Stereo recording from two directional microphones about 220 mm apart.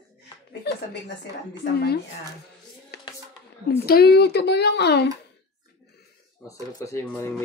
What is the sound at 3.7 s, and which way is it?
Speech, 45° left (ahead or behind).